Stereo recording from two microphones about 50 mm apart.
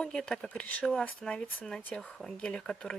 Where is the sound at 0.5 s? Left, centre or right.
Left.